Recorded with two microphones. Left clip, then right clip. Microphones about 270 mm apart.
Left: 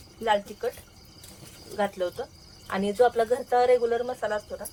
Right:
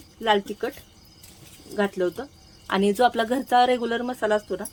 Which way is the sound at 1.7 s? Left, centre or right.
Right.